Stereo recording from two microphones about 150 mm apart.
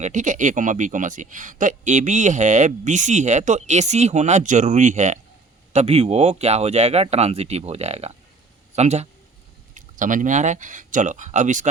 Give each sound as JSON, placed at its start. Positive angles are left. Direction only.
{"t": 0.0, "sound": "a man's voice", "side_deg": -55}
{"t": 5.7, "sound": "a man's voice", "side_deg": -40}
{"t": 9.7, "sound": "a man's voice", "side_deg": -60}